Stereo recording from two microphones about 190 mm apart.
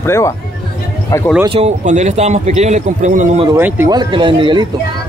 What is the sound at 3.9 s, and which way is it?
Speech, 25° right (ahead or behind).